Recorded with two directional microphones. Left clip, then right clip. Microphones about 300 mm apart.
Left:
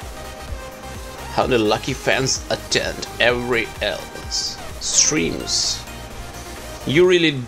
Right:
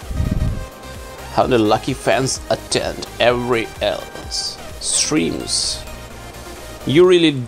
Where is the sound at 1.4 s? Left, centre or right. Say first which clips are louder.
Right 3 dB; centre.